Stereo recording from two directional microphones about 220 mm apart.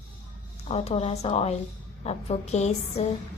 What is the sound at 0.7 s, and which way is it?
A woman's voice, 25° left (ahead or behind).